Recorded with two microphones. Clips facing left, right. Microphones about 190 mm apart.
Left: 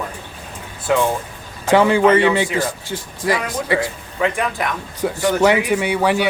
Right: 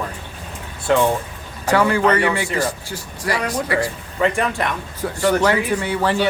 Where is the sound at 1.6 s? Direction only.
20° left (ahead or behind).